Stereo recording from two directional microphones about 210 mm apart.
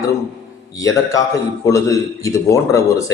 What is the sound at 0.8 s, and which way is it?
A man's voice, 15° left (ahead or behind).